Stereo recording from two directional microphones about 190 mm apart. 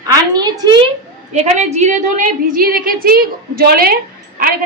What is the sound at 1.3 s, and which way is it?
A woman's voice, 35° right (ahead or behind).